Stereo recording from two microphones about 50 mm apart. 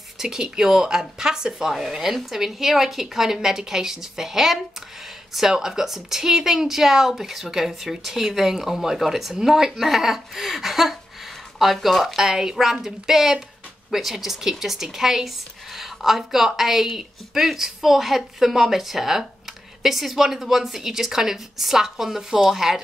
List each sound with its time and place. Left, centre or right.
0.2 s speech: centre